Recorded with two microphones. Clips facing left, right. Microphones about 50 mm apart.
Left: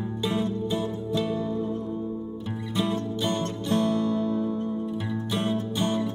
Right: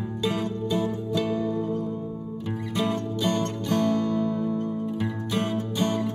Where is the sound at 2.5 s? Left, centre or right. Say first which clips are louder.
Even; right.